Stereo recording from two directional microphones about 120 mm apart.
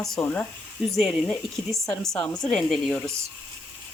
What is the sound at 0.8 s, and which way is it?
Speech, centre (ahead or behind).